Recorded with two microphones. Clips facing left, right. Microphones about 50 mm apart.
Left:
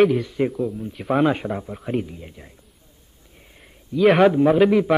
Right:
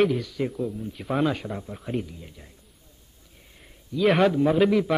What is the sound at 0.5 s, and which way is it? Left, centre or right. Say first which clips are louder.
Speech: left 4 dB; centre.